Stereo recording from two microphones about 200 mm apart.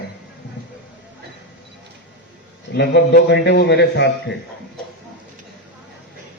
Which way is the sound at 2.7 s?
55° left (ahead or behind).